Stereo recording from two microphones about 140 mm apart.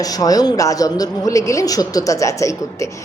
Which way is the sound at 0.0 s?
25° left (ahead or behind).